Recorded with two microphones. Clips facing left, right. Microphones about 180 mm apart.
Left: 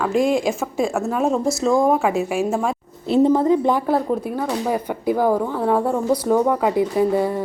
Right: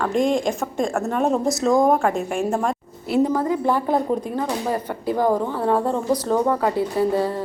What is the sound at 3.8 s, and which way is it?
Speech, 5° left (ahead or behind).